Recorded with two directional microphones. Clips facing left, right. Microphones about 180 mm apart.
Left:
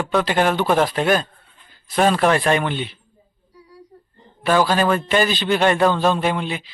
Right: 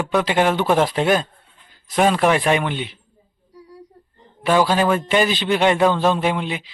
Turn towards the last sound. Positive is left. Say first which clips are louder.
# even
turn(degrees=-20)  # may be behind; listen again after turning